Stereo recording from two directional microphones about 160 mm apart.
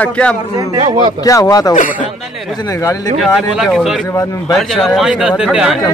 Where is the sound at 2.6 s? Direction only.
20° left (ahead or behind).